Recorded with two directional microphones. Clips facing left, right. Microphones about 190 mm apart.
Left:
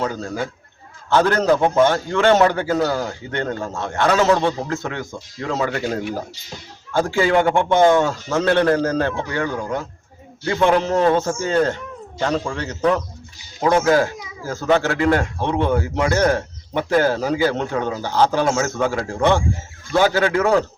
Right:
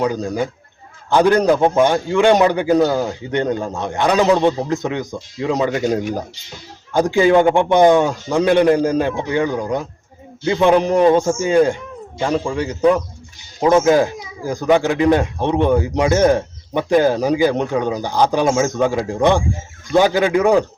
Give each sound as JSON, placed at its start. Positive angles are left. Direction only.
{"t": 0.0, "sound": "speech", "side_deg": -15}